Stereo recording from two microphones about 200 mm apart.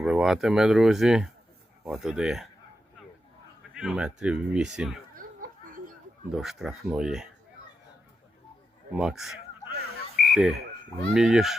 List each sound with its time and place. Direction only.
0.0 s speech: centre (ahead or behind)
3.8 s speech: 5° right (ahead or behind)
5.1 s laughter: 45° right (ahead or behind)
6.3 s speech: centre (ahead or behind)
8.9 s speech: 5° right (ahead or behind)
10.2 s bird: centre (ahead or behind)
11.1 s speech: 5° right (ahead or behind)